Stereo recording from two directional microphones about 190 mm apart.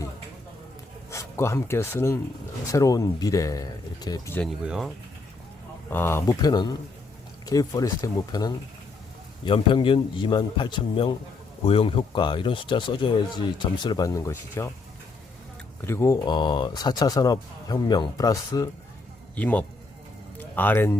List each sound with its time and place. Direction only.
1.1 s speech: 15° left (ahead or behind)
4.4 s speech: centre (ahead or behind)
5.9 s speech: 10° left (ahead or behind)
15.8 s speech: 15° left (ahead or behind)
19.4 s speech: 10° left (ahead or behind)